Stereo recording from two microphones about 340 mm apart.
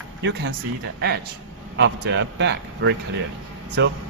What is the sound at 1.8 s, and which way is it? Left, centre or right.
Speech, right.